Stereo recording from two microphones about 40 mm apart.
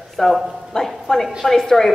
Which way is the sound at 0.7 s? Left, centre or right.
Centre.